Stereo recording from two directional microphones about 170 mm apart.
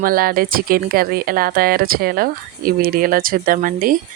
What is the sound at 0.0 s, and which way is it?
A woman's voice, 60° right (ahead or behind).